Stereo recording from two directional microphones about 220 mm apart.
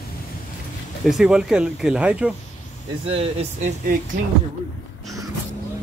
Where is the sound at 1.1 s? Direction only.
5° right (ahead or behind).